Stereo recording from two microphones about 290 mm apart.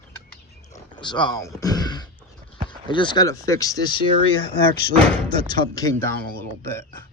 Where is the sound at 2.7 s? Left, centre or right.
Centre.